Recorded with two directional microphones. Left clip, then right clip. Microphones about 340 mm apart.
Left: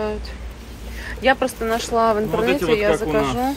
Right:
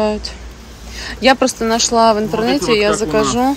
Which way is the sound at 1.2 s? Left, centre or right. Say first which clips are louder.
Right 6 dB; centre.